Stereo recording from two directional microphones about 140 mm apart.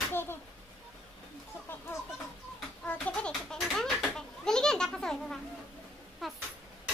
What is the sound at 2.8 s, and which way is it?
Children playing, 10° left (ahead or behind).